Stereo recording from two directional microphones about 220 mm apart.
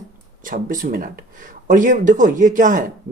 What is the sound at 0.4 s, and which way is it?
Speech, 40° right (ahead or behind).